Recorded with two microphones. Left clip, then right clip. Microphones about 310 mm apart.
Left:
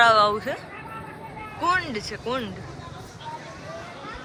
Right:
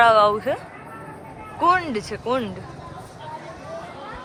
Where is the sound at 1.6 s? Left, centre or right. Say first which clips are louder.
Right 5 dB; centre.